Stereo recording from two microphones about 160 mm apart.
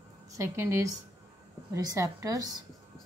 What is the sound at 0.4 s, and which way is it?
A woman's voice, 15° right (ahead or behind).